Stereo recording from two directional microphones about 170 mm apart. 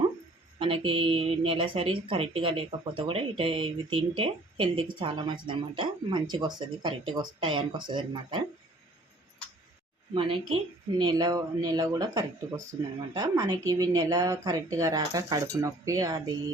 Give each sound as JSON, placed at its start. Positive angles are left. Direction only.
{"t": 0.6, "sound": "speech", "side_deg": -30}
{"t": 10.2, "sound": "speech", "side_deg": -30}